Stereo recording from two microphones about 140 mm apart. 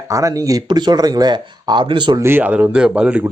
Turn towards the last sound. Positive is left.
turn(degrees=-5)  # may be behind; listen again after turning